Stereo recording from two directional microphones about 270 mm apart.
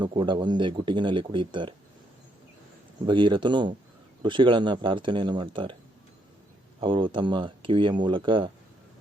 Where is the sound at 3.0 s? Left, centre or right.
Centre.